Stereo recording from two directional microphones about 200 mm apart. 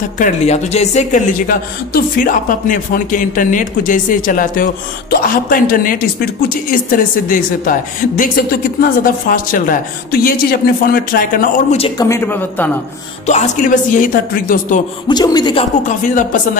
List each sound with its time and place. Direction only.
0.2 s a woman's voice: 35° left (ahead or behind)
12.0 s speech: 10° left (ahead or behind)
13.3 s speech: 40° left (ahead or behind)
15.0 s speech: 20° left (ahead or behind)
16.0 s speech: 40° left (ahead or behind)